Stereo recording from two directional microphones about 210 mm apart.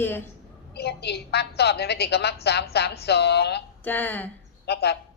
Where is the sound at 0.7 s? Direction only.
50° left (ahead or behind).